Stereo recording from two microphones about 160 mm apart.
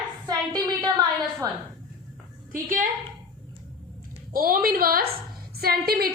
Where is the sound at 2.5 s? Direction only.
60° right (ahead or behind).